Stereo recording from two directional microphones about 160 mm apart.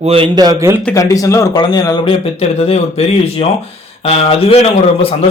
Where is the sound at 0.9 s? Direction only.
20° left (ahead or behind).